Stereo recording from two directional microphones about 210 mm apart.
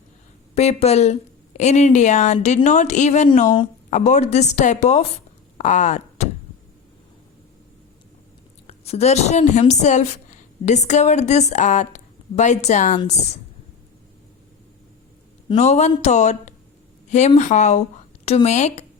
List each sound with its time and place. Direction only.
0.5 s a woman's voice: 30° left (ahead or behind)
8.6 s a woman's voice: 30° left (ahead or behind)
15.4 s a woman's voice: 30° left (ahead or behind)